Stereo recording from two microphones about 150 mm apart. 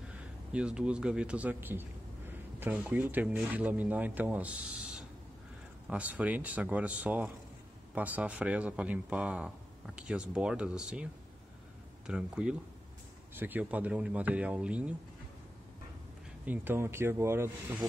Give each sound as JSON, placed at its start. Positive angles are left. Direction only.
{"t": 0.5, "sound": "a man's voice", "side_deg": -5}
{"t": 12.1, "sound": "speech", "side_deg": -5}
{"t": 16.4, "sound": "speech", "side_deg": -15}